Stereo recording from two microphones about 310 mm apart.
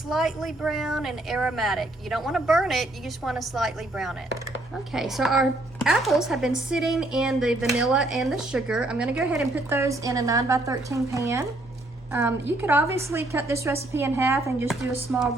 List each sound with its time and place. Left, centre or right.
0.1 s a woman's voice: centre